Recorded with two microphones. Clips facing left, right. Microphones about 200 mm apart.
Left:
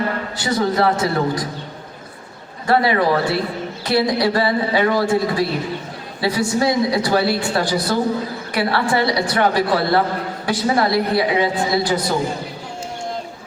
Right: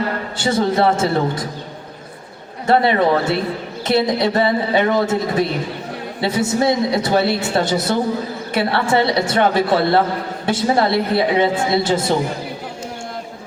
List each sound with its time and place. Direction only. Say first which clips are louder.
0.3 s a man's voice: right 2 dB; 25° right (ahead or behind)
2.6 s a man's voice: right 2 dB; 25° right (ahead or behind)